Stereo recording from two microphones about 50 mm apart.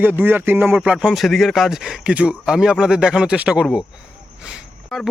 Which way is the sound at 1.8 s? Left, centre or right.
Centre.